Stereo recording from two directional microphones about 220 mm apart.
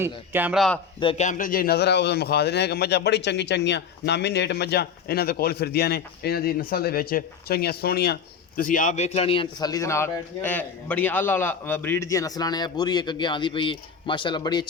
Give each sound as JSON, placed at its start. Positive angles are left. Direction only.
{"t": 0.0, "sound": "speech", "side_deg": -10}
{"t": 0.9, "sound": "a man's voice", "side_deg": 25}